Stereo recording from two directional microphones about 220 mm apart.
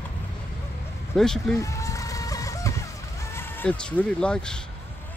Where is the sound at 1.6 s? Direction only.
15° left (ahead or behind).